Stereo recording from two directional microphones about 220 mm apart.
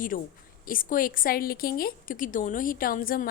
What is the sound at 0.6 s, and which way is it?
A woman's voice, 40° left (ahead or behind).